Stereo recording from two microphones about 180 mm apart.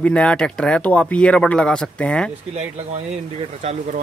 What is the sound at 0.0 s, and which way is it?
Speech, 5° left (ahead or behind).